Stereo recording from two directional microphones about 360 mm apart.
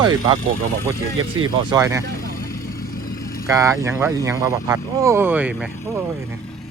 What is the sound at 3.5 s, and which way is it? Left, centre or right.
Speech, centre.